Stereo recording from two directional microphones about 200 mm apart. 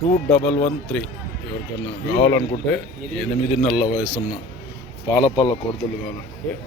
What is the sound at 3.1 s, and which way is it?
Speech, centre (ahead or behind).